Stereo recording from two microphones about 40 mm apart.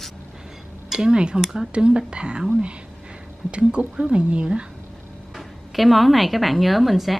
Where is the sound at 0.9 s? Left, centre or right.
Right.